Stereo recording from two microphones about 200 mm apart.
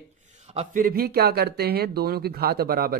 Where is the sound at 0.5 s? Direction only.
45° right (ahead or behind).